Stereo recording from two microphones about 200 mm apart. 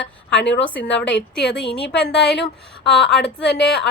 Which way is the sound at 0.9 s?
60° left (ahead or behind).